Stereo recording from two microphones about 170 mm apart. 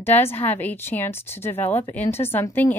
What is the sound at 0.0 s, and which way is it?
A woman's voice, 15° left (ahead or behind).